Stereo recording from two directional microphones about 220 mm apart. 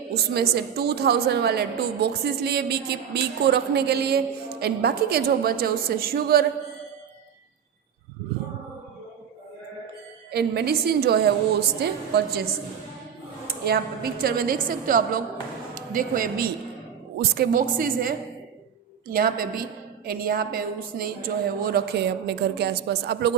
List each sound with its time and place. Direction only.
0.1 s a woman's voice: 45° right (ahead or behind)
10.3 s a woman's voice: 45° right (ahead or behind)
13.7 s a woman's voice: 45° right (ahead or behind)